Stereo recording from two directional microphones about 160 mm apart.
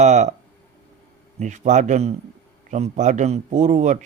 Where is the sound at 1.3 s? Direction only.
50° right (ahead or behind).